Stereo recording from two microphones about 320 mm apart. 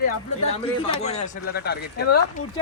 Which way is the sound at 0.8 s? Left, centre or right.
Centre.